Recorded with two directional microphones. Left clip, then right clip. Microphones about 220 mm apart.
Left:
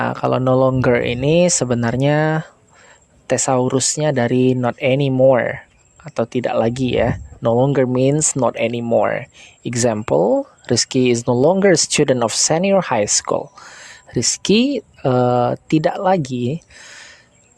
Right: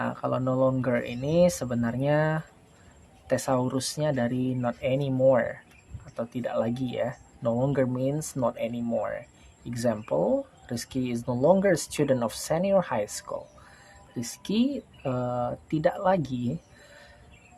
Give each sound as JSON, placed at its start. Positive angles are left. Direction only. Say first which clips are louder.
{"t": 0.0, "sound": "speech", "louder": "left 11 dB", "side_deg": 45}